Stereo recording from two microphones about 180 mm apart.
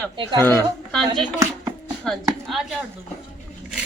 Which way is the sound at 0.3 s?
10° left (ahead or behind).